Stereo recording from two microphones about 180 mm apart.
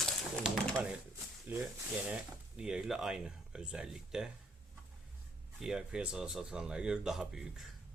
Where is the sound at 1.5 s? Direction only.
10° right (ahead or behind).